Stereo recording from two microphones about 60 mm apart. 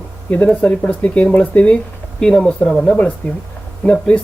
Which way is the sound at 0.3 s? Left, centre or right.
Left.